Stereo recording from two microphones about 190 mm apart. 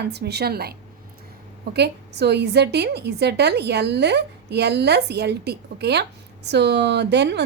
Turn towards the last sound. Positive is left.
turn(degrees=-65)  # may be behind; listen again after turning